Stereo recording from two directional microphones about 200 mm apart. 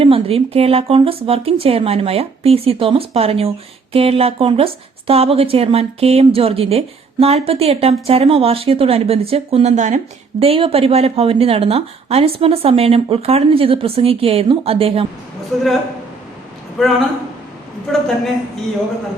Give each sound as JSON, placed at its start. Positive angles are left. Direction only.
{"t": 0.0, "sound": "speech", "side_deg": -30}
{"t": 15.5, "sound": "a man's voice", "side_deg": 0}
{"t": 16.8, "sound": "a man's voice", "side_deg": 0}